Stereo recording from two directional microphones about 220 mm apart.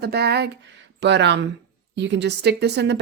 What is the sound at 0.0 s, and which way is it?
A woman's voice, 45° right (ahead or behind).